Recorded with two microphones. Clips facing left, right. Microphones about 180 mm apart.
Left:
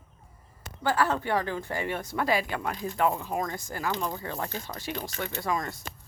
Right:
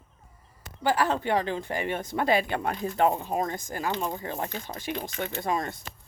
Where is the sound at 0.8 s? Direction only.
15° right (ahead or behind).